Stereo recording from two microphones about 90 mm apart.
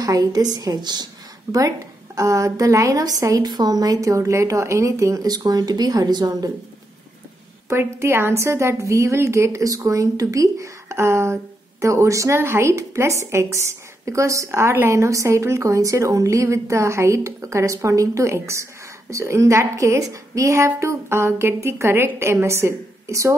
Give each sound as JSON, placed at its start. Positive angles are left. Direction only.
{"t": 0.0, "sound": "a woman's voice", "side_deg": -45}
{"t": 2.1, "sound": "a woman's voice", "side_deg": -35}
{"t": 7.7, "sound": "a woman's voice", "side_deg": -30}